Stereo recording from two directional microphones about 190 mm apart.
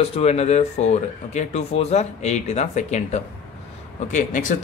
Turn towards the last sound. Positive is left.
turn(degrees=40)  # may be behind; listen again after turning